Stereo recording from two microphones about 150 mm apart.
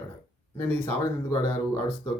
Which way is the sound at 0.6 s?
15° left (ahead or behind).